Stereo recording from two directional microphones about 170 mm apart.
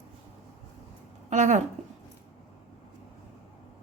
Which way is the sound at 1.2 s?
45° right (ahead or behind).